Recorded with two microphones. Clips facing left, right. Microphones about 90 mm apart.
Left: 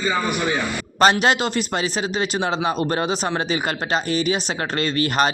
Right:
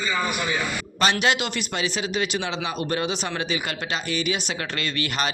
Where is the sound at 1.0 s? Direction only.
40° left (ahead or behind).